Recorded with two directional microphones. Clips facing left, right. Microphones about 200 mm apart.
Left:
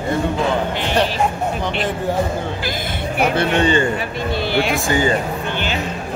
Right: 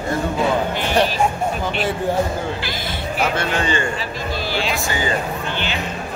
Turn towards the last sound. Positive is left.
turn(degrees=50)  # may be behind; listen again after turning